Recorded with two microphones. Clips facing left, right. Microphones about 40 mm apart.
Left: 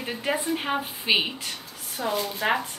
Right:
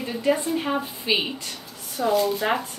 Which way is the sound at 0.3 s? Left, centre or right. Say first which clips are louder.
Right 4 dB; centre.